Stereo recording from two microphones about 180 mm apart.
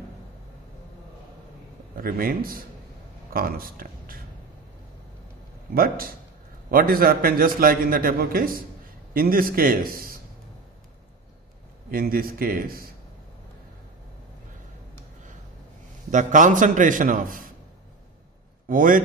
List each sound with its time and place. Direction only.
2.0 s a man's voice: 55° right (ahead or behind)
5.8 s a man's voice: 55° right (ahead or behind)
11.9 s a man's voice: 55° right (ahead or behind)
16.1 s a man's voice: 45° right (ahead or behind)
18.7 s a man's voice: 50° right (ahead or behind)